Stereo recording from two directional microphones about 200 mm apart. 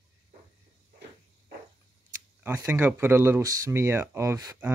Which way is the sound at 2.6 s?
10° right (ahead or behind).